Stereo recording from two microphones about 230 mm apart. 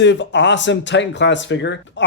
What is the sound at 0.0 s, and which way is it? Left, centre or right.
Speech, left.